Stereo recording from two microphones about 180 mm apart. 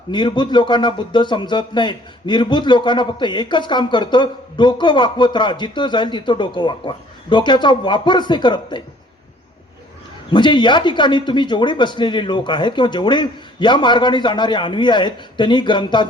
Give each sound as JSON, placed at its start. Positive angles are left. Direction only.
{"t": 0.1, "sound": "speech", "side_deg": 25}
{"t": 10.3, "sound": "speech", "side_deg": 25}